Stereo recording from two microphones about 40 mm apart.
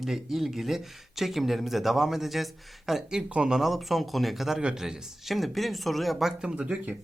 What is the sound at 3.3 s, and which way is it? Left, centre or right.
Speech, right.